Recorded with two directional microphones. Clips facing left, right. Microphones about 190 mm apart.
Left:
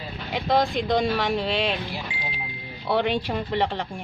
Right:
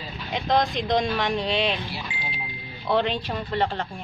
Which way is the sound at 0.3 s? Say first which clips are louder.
Left 1 dB; 5° left (ahead or behind).